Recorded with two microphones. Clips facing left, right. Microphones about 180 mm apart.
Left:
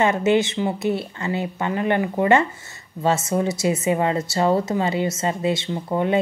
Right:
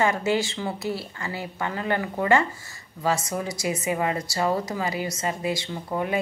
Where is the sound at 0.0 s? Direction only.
20° left (ahead or behind).